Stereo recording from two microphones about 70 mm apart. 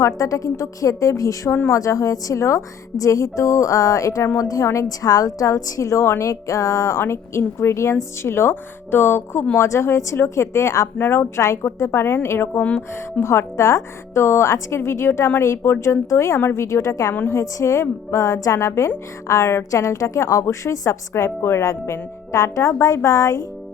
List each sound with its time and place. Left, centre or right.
0.0 s a woman's voice: left
7.0 s a woman's voice: left
10.9 s speech: left
11.3 s a woman's voice: left
13.1 s a woman's voice: left
21.6 s a woman's voice: left